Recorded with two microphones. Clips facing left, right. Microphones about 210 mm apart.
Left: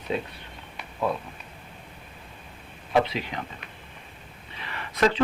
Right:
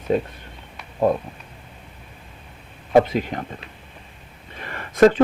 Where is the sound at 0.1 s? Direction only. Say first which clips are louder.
Right 8 dB; 50° right (ahead or behind).